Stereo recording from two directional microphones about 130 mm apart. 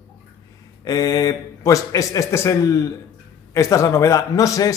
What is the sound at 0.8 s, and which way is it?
A man's voice, 30° left (ahead or behind).